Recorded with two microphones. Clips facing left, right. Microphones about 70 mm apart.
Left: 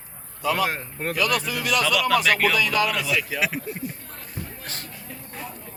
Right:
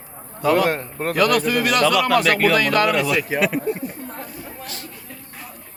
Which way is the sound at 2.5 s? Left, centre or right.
Right.